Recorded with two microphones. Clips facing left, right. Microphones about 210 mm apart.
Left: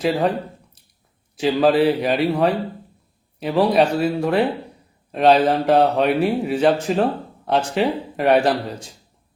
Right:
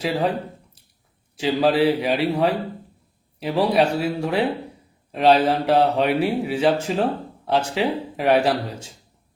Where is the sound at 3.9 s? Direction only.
60° left (ahead or behind).